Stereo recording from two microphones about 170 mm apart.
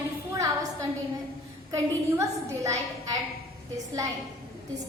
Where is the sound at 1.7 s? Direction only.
20° right (ahead or behind).